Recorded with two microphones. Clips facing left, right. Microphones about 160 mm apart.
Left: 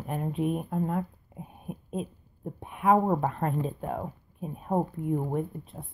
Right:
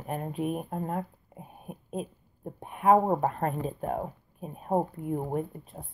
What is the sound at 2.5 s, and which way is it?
Speech, 40° right (ahead or behind).